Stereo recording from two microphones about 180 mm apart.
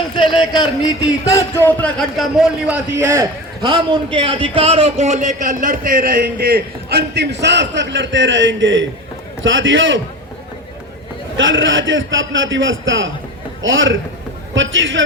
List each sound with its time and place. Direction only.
0.2 s a man's voice: 25° left (ahead or behind); by 3.2 s 10° right (ahead or behind)
3.6 s a man's voice: 25° right (ahead or behind); by 10.0 s 90° right
11.3 s a man's voice: 90° right